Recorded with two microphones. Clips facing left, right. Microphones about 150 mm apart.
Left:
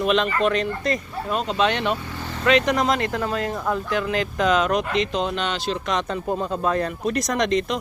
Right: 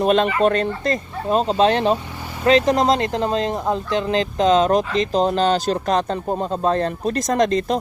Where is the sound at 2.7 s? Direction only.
30° right (ahead or behind).